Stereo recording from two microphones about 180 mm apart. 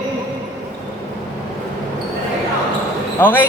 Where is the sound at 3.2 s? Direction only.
10° left (ahead or behind).